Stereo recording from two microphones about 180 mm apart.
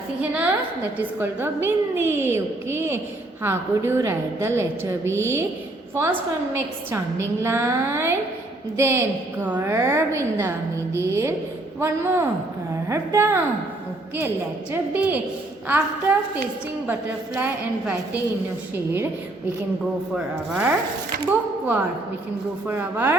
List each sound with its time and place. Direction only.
0.2 s a woman's voice: 10° right (ahead or behind)
20.1 s a woman's voice: 5° right (ahead or behind)